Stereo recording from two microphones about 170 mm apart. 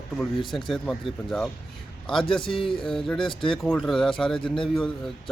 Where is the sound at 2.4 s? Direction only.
30° left (ahead or behind).